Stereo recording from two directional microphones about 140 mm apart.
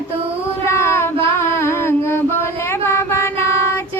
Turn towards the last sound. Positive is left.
turn(degrees=20)  # may be behind; listen again after turning